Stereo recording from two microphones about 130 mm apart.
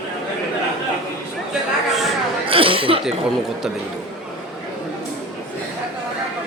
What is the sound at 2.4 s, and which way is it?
Speech, 45° right (ahead or behind).